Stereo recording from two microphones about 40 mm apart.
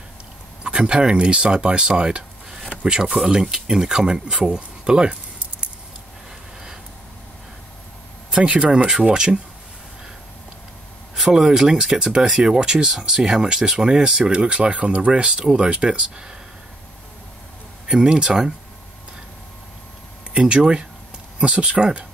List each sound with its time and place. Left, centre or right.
0.7 s speech: right
8.3 s speech: right
11.1 s speech: centre
17.8 s speech: right
20.3 s speech: right